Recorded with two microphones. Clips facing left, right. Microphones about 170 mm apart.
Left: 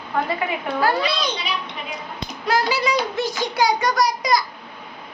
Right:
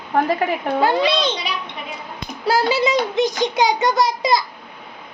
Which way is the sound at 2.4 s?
30° right (ahead or behind).